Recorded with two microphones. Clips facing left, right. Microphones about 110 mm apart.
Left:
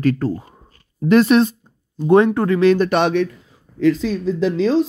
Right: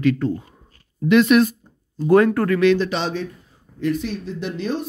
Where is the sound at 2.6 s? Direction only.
55° left (ahead or behind); by 3.6 s 90° left.